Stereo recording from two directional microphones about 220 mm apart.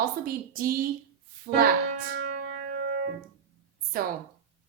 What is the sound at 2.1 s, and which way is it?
Music, 50° right (ahead or behind).